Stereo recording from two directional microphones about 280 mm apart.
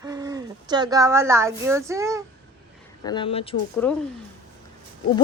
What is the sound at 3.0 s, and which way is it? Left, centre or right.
Speech, centre.